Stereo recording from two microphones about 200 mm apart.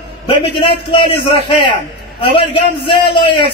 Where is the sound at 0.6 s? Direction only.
25° left (ahead or behind).